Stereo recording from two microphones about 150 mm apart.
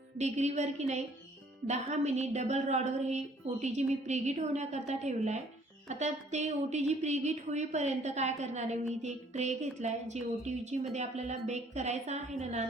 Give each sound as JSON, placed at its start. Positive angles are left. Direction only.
{"t": 0.2, "sound": "speech", "side_deg": -50}